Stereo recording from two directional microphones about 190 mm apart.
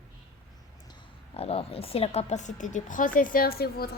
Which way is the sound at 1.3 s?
30° left (ahead or behind).